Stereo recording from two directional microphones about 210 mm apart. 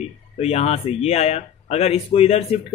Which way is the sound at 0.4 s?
30° left (ahead or behind).